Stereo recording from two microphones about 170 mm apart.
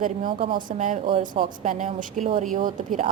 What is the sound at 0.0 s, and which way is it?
A woman's voice, 50° right (ahead or behind).